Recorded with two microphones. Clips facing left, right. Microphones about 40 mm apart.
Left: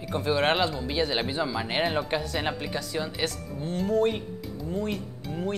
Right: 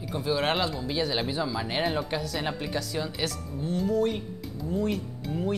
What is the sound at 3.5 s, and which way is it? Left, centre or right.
Speech, left.